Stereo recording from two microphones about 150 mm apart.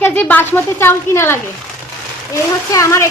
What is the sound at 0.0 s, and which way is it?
A woman's voice, 10° left (ahead or behind).